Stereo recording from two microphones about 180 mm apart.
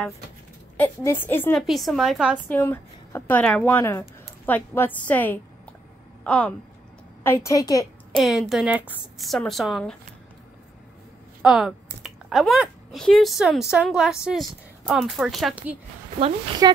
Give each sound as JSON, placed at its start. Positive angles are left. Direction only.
{"t": 0.7, "sound": "a woman's voice", "side_deg": 15}
{"t": 1.7, "sound": "a woman's voice", "side_deg": 0}
{"t": 2.3, "sound": "a woman's voice", "side_deg": 10}
{"t": 8.1, "sound": "a woman's voice", "side_deg": 0}
{"t": 11.4, "sound": "speech", "side_deg": 0}
{"t": 16.6, "sound": "speech", "side_deg": -20}